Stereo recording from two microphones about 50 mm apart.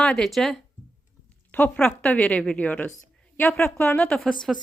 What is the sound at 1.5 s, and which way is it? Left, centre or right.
Speech, left.